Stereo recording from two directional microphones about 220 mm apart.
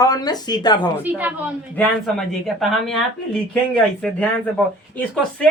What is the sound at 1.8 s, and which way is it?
Speech, centre (ahead or behind).